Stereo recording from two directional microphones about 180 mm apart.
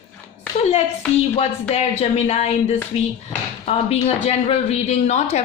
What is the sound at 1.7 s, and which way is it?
Speech, 35° left (ahead or behind).